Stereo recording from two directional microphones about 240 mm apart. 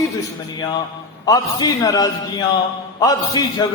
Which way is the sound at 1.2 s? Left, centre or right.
Centre.